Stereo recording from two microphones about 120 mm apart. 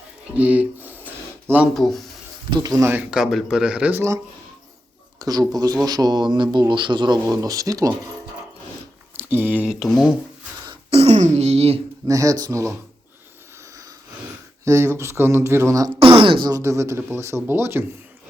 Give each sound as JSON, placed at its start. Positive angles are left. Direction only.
{"t": 0.3, "sound": "a sound", "side_deg": -10}
{"t": 1.7, "sound": "speech", "side_deg": 0}
{"t": 2.5, "sound": "speech", "side_deg": -35}
{"t": 3.1, "sound": "speech", "side_deg": 0}
{"t": 5.2, "sound": "speech", "side_deg": -30}
{"t": 9.1, "sound": "speech", "side_deg": -15}
{"t": 9.8, "sound": "speech", "side_deg": 0}
{"t": 10.9, "sound": "speech", "side_deg": -60}
{"t": 12.0, "sound": "speech", "side_deg": -30}
{"t": 14.6, "sound": "speech", "side_deg": -25}
{"t": 16.0, "sound": "speech", "side_deg": -50}
{"t": 16.6, "sound": "speech", "side_deg": -25}